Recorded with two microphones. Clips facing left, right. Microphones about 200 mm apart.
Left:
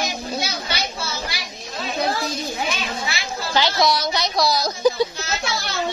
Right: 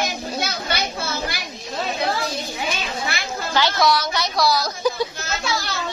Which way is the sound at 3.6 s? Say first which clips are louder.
Right 1 dB; 15° left (ahead or behind).